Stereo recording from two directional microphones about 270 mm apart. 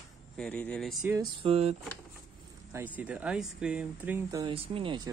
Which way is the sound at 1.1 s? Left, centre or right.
Right.